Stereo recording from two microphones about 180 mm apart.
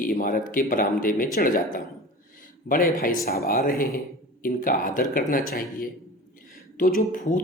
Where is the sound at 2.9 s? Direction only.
50° left (ahead or behind).